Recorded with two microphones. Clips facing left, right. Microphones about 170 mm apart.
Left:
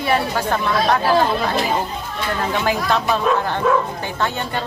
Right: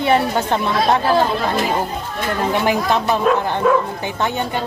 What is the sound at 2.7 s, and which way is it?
Speech, 15° right (ahead or behind).